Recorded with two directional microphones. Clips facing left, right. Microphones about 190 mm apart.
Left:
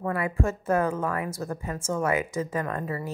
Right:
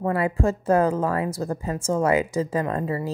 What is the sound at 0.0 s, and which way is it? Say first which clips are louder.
Speech: right 5 dB; 30° right (ahead or behind).